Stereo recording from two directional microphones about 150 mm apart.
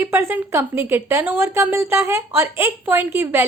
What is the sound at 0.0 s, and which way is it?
A woman's voice, 15° right (ahead or behind).